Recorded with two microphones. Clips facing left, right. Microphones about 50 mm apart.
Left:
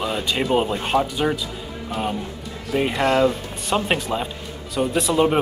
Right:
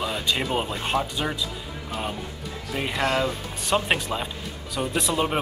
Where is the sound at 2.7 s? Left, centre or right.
Centre.